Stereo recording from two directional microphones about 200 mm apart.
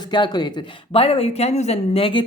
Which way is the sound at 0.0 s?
20° left (ahead or behind).